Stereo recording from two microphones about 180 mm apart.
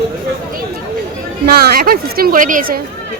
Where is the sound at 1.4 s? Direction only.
60° right (ahead or behind).